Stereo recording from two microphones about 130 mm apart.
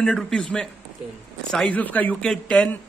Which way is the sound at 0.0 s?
5° left (ahead or behind).